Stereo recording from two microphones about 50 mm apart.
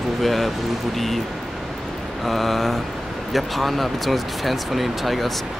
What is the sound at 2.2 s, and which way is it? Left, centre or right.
Speech, centre.